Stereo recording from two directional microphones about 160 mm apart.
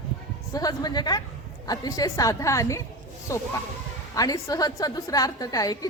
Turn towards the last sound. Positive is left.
turn(degrees=20)  # may be behind; listen again after turning